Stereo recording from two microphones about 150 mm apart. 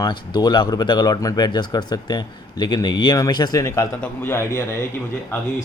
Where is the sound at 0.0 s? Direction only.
25° left (ahead or behind).